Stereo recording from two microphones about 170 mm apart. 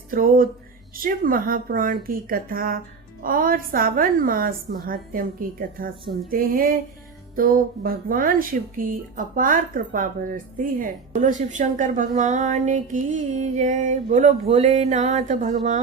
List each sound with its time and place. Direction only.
0.1 s a woman's voice: 55° right (ahead or behind)